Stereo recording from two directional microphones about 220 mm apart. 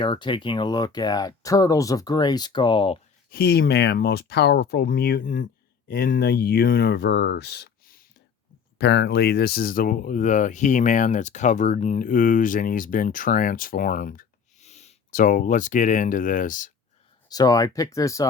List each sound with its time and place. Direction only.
0.0 s speech: 20° left (ahead or behind)
3.2 s speech: 45° left (ahead or behind)
17.2 s speech: 15° left (ahead or behind)